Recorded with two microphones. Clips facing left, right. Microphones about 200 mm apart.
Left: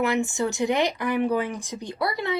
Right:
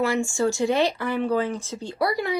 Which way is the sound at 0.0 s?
20° left (ahead or behind).